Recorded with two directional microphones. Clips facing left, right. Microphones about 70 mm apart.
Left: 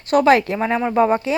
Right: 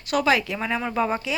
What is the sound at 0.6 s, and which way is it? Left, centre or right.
Speech, left.